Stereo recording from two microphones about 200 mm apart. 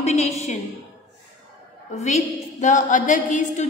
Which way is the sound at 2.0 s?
35° left (ahead or behind).